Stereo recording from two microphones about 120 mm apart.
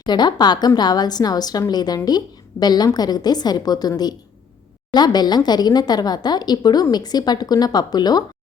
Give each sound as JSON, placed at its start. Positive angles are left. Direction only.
{"t": 0.0, "sound": "a woman's voice", "side_deg": 35}